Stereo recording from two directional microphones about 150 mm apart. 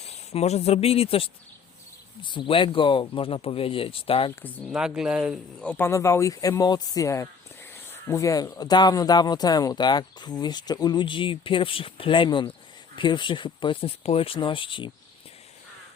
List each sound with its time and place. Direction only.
0.3 s speech: 45° left (ahead or behind)
4.7 s speech: 5° right (ahead or behind)
5.5 s speech: 10° left (ahead or behind); by 14.8 s 35° left (ahead or behind)